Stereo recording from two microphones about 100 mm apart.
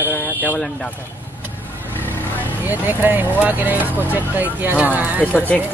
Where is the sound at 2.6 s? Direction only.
20° right (ahead or behind).